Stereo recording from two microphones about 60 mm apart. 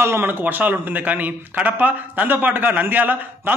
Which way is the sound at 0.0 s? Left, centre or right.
Right.